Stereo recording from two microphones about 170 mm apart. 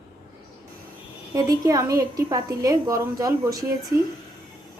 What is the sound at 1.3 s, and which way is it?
A woman's voice, 20° right (ahead or behind).